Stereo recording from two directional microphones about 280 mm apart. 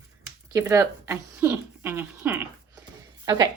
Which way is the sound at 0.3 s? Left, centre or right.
Centre.